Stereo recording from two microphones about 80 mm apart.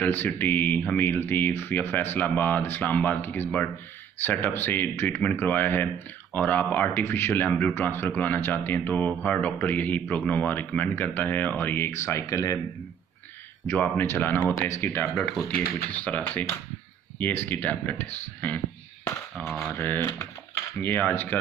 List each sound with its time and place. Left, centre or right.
0.0 s speech: left
12.1 s speech: left
13.7 s speech: left
19.3 s speech: centre
19.7 s speech: left